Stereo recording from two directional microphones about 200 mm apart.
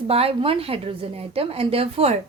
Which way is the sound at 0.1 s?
30° right (ahead or behind).